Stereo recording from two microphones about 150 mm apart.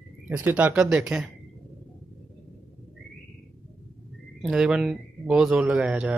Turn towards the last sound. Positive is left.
turn(degrees=-5)  # may be behind; listen again after turning